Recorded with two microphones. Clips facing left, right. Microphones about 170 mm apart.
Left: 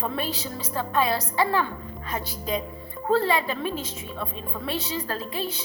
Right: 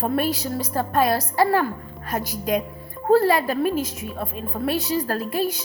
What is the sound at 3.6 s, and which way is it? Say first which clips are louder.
Speech: right 7 dB; 10° right (ahead or behind).